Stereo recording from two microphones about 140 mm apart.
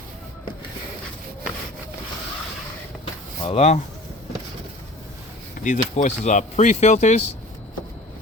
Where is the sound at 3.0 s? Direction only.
45° left (ahead or behind).